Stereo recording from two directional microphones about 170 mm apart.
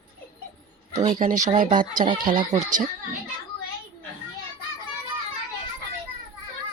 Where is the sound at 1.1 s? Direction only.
50° right (ahead or behind).